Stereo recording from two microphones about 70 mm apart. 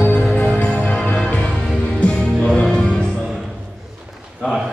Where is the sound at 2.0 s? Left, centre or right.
Centre.